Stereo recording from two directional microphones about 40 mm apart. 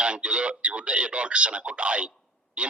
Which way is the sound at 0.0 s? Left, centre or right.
Right.